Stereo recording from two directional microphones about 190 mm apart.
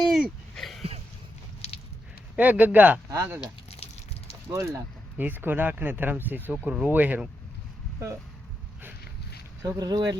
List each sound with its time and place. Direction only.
0.0 s a sound: centre (ahead or behind)
1.6 s biting: 35° left (ahead or behind)
2.3 s speech: 10° right (ahead or behind)
3.4 s a sound: 30° left (ahead or behind)
4.5 s speech: 15° right (ahead or behind)
9.6 s speech: 20° right (ahead or behind)